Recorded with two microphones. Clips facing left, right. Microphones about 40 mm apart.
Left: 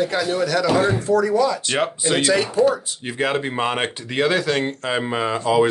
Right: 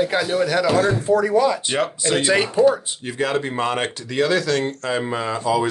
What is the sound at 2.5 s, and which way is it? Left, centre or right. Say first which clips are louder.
Speech: right 4 dB; centre.